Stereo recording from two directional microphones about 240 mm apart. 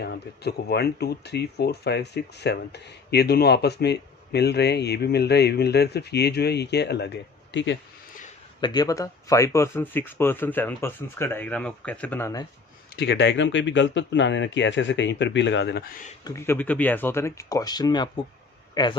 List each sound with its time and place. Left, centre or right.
0.0 s speech: left
8.6 s speech: centre
13.0 s speech: left
16.2 s a man's voice: centre